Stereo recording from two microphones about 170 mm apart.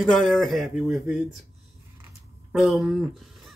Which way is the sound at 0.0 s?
Centre (ahead or behind).